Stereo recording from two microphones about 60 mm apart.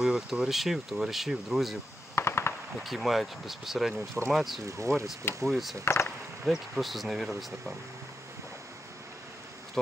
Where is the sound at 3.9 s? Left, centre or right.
Right.